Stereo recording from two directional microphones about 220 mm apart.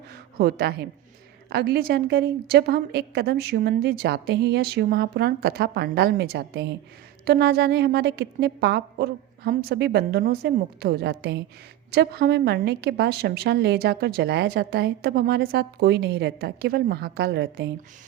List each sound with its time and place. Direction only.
0.3 s a woman's voice: 45° right (ahead or behind)